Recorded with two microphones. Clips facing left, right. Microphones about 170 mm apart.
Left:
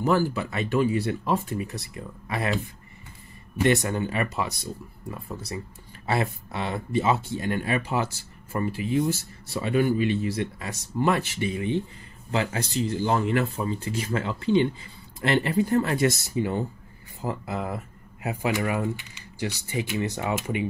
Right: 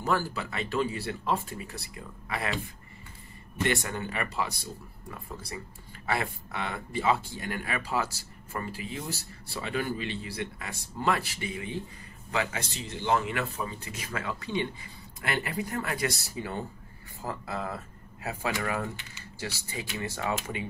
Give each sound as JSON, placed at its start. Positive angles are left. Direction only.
{"t": 0.0, "sound": "speech", "side_deg": 20}
{"t": 3.7, "sound": "speech", "side_deg": 20}
{"t": 6.0, "sound": "speech", "side_deg": 25}